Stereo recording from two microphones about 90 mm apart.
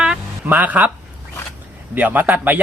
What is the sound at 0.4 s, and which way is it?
Speech, 20° right (ahead or behind).